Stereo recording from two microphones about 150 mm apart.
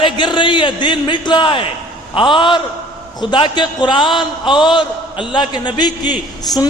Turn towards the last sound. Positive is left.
turn(degrees=25)  # may be behind; listen again after turning